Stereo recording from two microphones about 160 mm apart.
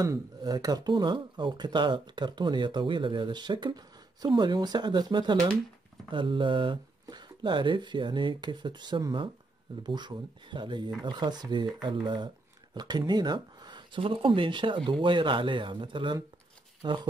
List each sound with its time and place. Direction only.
0.0 s speech: 25° right (ahead or behind)